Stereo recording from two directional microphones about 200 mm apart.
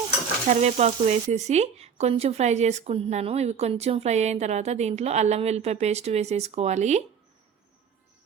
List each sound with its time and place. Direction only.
0.4 s speech: 35° right (ahead or behind)